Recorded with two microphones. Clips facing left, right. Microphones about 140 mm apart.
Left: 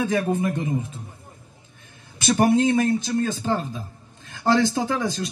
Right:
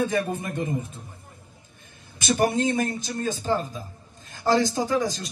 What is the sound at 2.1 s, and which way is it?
A man's voice, 60° left (ahead or behind).